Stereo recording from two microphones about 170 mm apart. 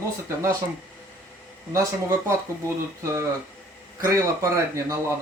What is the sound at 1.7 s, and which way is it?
Speech, 20° right (ahead or behind).